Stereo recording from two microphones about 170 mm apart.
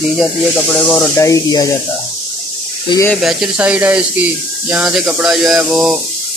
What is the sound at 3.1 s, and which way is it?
Speech, centre (ahead or behind).